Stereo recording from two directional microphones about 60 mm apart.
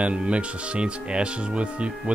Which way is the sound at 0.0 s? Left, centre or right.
Centre.